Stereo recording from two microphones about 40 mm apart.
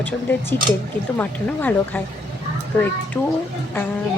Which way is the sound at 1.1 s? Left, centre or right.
Left.